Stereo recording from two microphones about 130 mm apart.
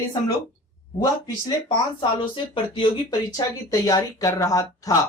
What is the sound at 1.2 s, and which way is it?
Speech, 35° left (ahead or behind).